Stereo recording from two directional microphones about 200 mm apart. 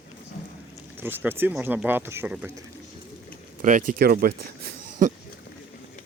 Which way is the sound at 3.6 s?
45° right (ahead or behind).